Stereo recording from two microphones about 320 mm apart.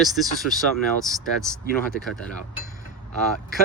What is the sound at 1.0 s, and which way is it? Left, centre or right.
Speech, centre.